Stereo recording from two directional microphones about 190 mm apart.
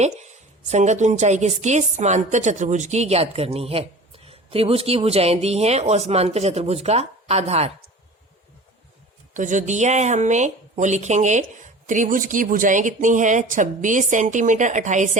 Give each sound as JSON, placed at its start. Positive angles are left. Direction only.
{"t": 0.7, "sound": "a woman's voice", "side_deg": -40}
{"t": 9.3, "sound": "a woman's voice", "side_deg": -40}